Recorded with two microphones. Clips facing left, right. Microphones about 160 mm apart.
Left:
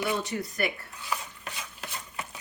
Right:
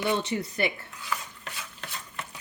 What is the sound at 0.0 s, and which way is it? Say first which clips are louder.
Speech: right 2 dB; 25° right (ahead or behind).